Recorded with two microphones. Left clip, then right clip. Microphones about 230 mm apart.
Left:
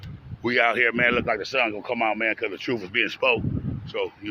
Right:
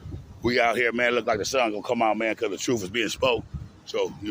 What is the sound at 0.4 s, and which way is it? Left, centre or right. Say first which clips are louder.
Speech: left 2 dB; centre.